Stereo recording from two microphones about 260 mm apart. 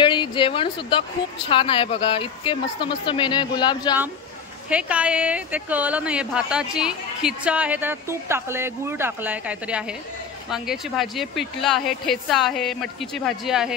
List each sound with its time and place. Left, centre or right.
0.0 s a woman's voice: centre
4.6 s speech: centre